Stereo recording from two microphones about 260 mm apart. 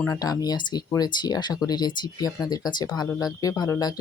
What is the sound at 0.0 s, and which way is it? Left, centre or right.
Speech, centre.